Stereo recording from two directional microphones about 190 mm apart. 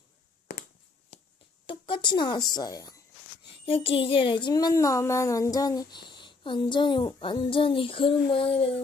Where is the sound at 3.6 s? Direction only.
30° left (ahead or behind).